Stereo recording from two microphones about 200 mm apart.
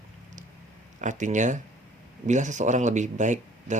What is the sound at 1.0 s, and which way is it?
Speech, 40° right (ahead or behind).